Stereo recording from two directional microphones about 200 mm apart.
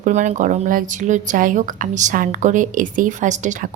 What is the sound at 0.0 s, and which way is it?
A woman's voice, 35° right (ahead or behind).